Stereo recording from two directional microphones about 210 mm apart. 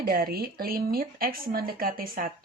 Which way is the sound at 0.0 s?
45° right (ahead or behind).